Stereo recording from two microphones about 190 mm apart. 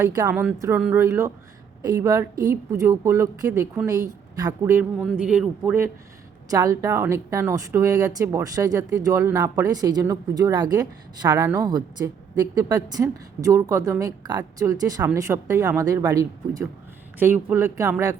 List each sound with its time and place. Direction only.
0.0 s a woman's voice: 15° right (ahead or behind)